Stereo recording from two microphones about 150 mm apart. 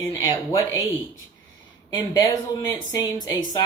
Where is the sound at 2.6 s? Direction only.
25° left (ahead or behind).